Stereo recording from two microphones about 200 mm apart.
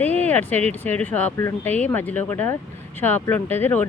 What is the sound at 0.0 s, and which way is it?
Speech, 10° left (ahead or behind).